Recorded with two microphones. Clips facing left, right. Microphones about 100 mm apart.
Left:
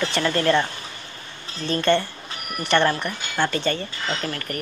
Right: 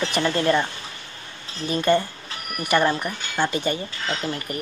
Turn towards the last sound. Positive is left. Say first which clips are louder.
# even
turn(degrees=-15)  # may be behind; listen again after turning